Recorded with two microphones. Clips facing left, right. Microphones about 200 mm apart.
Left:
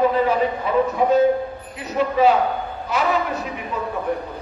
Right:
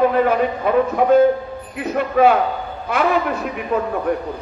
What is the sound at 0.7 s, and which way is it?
Speech, 55° right (ahead or behind).